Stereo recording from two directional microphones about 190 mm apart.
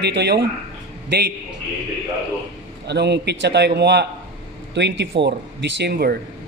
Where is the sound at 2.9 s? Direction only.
60° right (ahead or behind).